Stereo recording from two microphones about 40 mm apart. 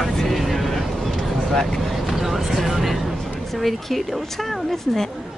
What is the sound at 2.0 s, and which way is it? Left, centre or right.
Vehicle, centre.